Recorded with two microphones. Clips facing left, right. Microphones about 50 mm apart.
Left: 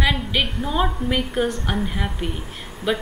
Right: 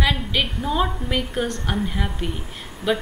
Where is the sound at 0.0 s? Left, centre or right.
Centre.